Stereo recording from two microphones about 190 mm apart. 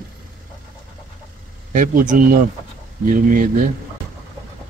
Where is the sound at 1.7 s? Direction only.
45° right (ahead or behind).